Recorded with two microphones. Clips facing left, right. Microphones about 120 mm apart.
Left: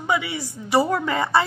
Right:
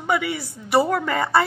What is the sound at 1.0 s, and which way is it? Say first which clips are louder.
Speech: even; 15° left (ahead or behind).